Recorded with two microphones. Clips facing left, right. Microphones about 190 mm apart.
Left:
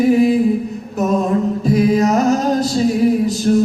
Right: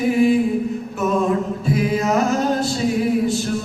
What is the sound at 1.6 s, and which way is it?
Music, 40° left (ahead or behind).